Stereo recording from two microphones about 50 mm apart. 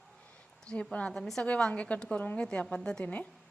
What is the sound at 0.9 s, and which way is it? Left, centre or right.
Speech, left.